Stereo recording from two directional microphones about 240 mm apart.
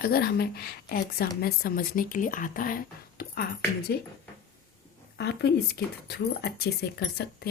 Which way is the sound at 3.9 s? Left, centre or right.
Left.